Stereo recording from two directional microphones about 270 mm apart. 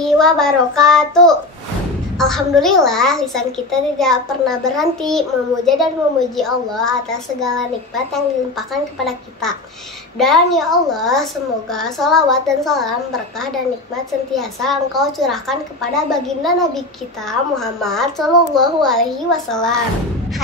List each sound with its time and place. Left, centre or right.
0.0 s a child's voice: centre
14.3 s a child's voice: centre